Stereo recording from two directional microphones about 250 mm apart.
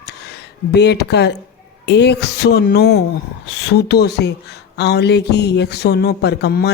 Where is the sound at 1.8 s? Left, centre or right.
Left.